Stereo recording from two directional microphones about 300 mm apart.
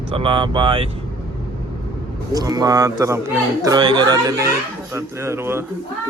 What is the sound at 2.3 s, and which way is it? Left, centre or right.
Speech, centre.